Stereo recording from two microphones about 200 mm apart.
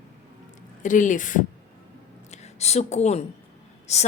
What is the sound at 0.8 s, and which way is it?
A woman's voice, 40° left (ahead or behind).